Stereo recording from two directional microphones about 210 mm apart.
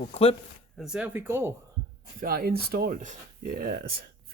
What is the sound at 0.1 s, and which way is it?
Speech, 25° left (ahead or behind).